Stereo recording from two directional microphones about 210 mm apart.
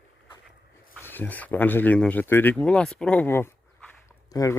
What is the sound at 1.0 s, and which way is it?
Speech, 10° left (ahead or behind).